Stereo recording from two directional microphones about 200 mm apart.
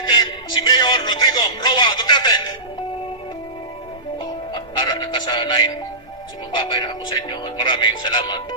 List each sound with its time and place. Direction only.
0.0 s music: 20° left (ahead or behind)
4.2 s music: 25° left (ahead or behind)
6.5 s speech: 20° left (ahead or behind)